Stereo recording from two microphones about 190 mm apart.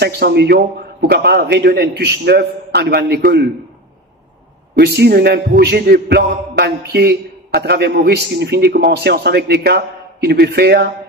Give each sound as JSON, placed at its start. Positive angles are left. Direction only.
{"t": 0.0, "sound": "a man's voice", "side_deg": -60}
{"t": 4.7, "sound": "a man's voice", "side_deg": -60}